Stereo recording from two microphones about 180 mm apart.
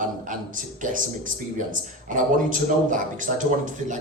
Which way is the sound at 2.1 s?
45° right (ahead or behind).